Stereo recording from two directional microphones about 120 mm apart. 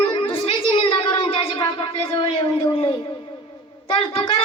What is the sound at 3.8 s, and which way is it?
Speech, 50° left (ahead or behind).